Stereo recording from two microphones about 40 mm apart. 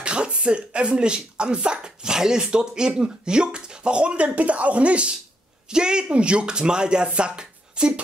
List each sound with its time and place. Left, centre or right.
0.0 s speech: right
5.7 s speech: right